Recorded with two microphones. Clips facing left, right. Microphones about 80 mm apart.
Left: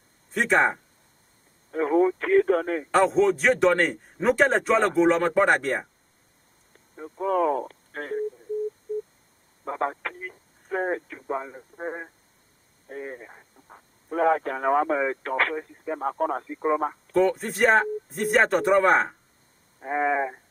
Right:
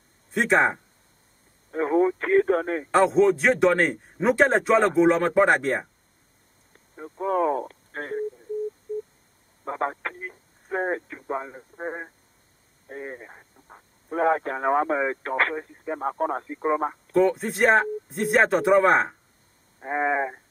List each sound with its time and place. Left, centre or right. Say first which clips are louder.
0.3 s a man's voice: right 1 dB; centre
1.7 s speech: even; centre
2.8 s a man's voice: right 3 dB; centre
7.2 s speech: even; right
7.6 s radio: right 1 dB; right
9.7 s a sound: even; centre
10.7 s speech: even; centre
15.5 s speech: even; centre
16.5 s a man's voice: even; centre
19.8 s speech: even; centre